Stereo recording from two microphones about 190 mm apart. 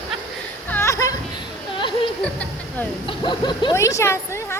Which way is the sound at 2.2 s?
5° left (ahead or behind).